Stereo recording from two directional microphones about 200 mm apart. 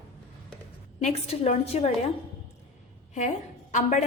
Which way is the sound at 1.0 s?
30° left (ahead or behind).